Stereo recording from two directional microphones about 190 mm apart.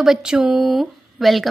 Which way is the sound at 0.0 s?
5° right (ahead or behind).